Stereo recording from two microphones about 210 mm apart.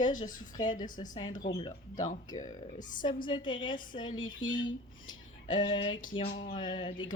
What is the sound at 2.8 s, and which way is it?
Speech, 40° left (ahead or behind).